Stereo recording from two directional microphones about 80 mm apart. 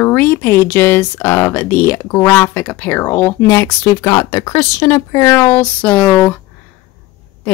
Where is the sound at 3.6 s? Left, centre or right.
Left.